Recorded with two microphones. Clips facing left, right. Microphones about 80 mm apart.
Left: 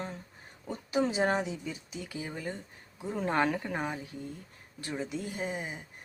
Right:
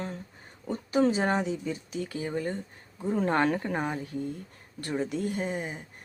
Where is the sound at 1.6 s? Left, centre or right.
Right.